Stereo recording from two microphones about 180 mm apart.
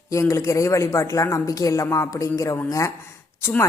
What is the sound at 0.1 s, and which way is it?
A woman's voice, 15° left (ahead or behind).